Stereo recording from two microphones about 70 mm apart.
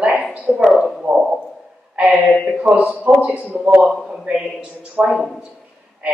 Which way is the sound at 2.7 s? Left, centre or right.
Centre.